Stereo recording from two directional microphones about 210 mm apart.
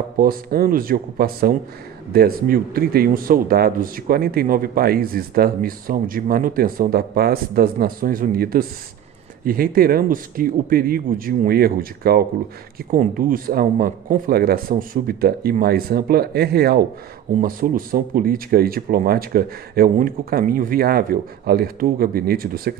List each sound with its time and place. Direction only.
0.2 s speech: 45° right (ahead or behind)